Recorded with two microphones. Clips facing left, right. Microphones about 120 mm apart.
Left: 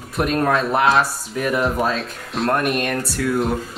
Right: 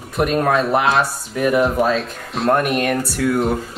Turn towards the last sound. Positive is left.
turn(degrees=0)  # may be behind; listen again after turning